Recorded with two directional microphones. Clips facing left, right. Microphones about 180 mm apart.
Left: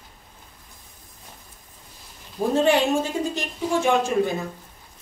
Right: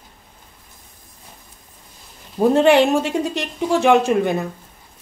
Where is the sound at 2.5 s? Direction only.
70° right (ahead or behind).